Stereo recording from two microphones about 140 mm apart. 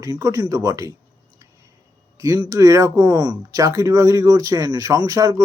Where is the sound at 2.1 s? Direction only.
25° right (ahead or behind).